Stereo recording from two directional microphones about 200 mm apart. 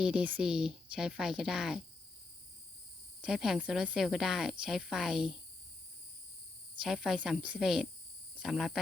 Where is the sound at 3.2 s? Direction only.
5° right (ahead or behind).